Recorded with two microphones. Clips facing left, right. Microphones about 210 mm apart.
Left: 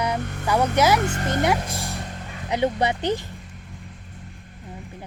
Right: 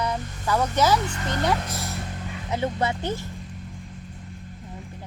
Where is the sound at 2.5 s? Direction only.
15° left (ahead or behind).